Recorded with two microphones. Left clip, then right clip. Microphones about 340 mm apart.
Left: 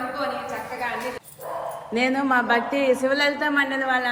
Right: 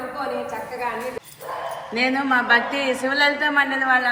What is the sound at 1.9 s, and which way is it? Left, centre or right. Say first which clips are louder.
A woman's voice: right 1 dB; left.